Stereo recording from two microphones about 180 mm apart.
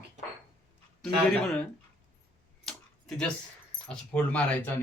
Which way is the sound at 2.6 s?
5° left (ahead or behind).